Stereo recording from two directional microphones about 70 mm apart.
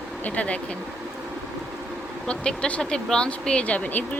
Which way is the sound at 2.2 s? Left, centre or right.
Centre.